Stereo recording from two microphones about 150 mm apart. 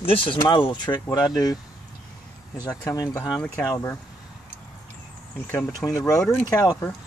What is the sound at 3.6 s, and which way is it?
Speech, 25° left (ahead or behind).